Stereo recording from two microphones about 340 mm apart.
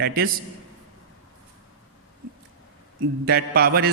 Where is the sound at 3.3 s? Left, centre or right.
Right.